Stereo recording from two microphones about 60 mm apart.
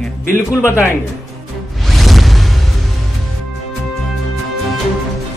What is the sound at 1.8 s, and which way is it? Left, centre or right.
Music, centre.